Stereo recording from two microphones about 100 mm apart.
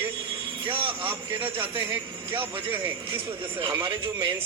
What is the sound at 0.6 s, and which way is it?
Speech, 60° right (ahead or behind).